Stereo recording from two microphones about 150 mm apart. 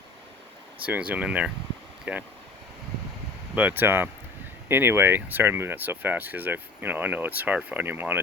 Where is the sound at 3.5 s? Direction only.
10° right (ahead or behind).